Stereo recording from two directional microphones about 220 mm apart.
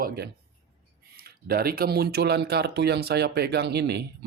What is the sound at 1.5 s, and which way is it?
Speech, 45° right (ahead or behind).